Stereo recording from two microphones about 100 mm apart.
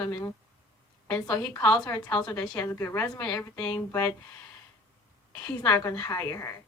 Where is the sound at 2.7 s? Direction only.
25° left (ahead or behind).